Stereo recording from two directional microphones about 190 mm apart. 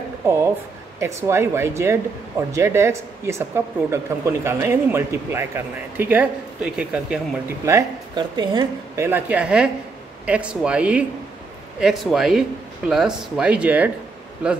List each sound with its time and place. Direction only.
0.2 s speech: 15° right (ahead or behind)
7.6 s speech: 20° right (ahead or behind)